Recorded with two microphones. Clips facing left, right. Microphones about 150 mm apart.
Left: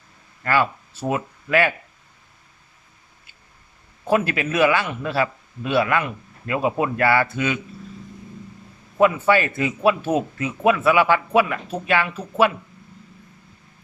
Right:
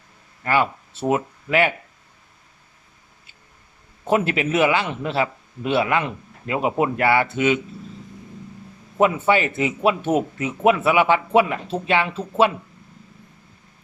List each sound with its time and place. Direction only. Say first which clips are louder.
0.4 s speech: even; 20° right (ahead or behind)
4.0 s speech: right 1 dB; 20° right (ahead or behind)
9.0 s speech: left 1 dB; 20° right (ahead or behind)